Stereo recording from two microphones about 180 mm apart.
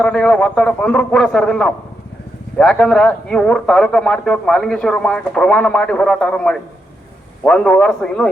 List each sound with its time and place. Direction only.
0.0 s speech: 5° left (ahead or behind)